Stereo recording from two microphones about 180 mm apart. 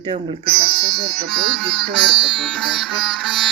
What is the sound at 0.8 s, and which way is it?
Music, 60° right (ahead or behind).